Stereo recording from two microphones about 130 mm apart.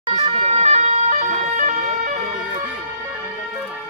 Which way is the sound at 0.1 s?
55° right (ahead or behind).